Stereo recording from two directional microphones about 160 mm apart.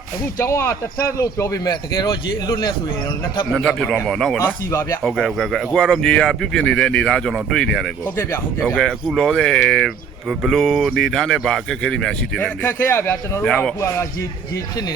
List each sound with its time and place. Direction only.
0.3 s speech: 15° left (ahead or behind)
3.5 s speech: 5° left (ahead or behind)
4.4 s speech: 15° left (ahead or behind)
5.0 s speech: centre (ahead or behind)
8.1 s speech: 15° left (ahead or behind)
8.6 s speech: centre (ahead or behind)
13.4 s speech: 5° left (ahead or behind)
13.7 s speech: 20° left (ahead or behind)